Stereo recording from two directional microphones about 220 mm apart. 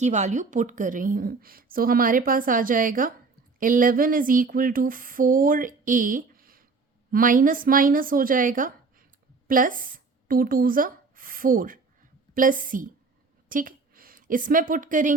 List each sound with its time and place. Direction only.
0.0 s a woman's voice: 30° right (ahead or behind)